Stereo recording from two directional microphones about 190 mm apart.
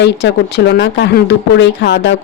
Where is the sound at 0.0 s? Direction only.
65° left (ahead or behind).